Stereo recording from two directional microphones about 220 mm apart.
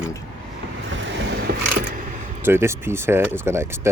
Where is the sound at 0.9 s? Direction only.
55° right (ahead or behind).